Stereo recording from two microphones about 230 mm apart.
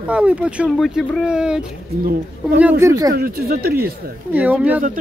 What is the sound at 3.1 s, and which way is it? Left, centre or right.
Speech, right.